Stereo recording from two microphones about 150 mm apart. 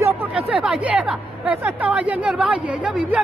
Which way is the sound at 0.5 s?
5° right (ahead or behind).